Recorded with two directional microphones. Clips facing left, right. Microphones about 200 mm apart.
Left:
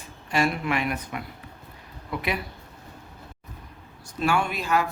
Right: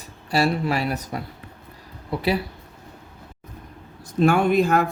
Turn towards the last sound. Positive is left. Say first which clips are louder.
# right 7 dB
turn(degrees=-50)  # may be behind; listen again after turning